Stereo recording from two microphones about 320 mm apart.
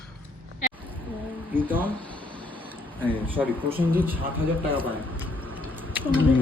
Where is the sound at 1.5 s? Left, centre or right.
Centre.